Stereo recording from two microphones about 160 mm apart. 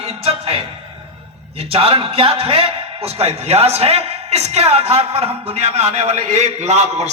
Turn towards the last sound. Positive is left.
turn(degrees=-45)  # may be behind; listen again after turning